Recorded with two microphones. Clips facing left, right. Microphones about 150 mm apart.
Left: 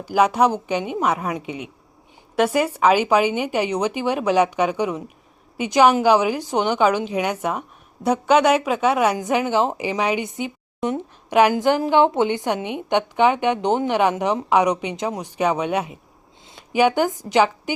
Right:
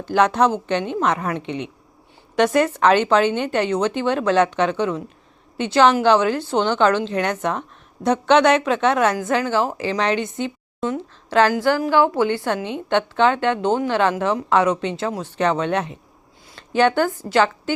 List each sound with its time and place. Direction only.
0.0 s a woman's voice: 10° left (ahead or behind)